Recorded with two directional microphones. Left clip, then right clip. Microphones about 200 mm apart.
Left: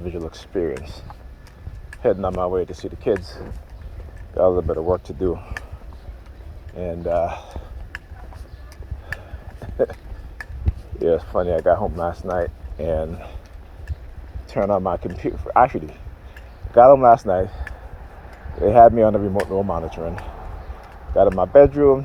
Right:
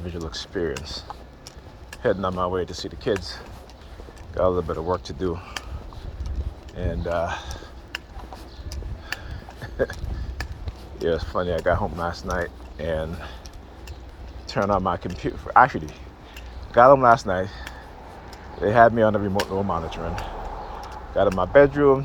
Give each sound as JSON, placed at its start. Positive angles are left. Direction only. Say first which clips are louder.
{"t": 0.0, "sound": "speech", "louder": "left 2 dB", "side_deg": 40}
{"t": 4.4, "sound": "speech", "louder": "left 5 dB", "side_deg": 45}
{"t": 6.7, "sound": "speech", "louder": "left 4 dB", "side_deg": 45}
{"t": 9.6, "sound": "a sound", "louder": "left 4 dB", "side_deg": 40}
{"t": 11.0, "sound": "speech", "louder": "left 5 dB", "side_deg": 45}
{"t": 14.6, "sound": "speech", "louder": "left 3 dB", "side_deg": 40}
{"t": 21.2, "sound": "speech", "louder": "left 4 dB", "side_deg": 45}